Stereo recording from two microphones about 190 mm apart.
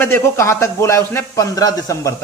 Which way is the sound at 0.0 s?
15° left (ahead or behind).